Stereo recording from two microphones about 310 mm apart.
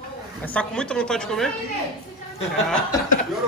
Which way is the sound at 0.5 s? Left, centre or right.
Centre.